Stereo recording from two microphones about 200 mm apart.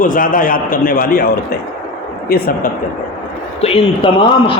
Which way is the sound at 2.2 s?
50° left (ahead or behind).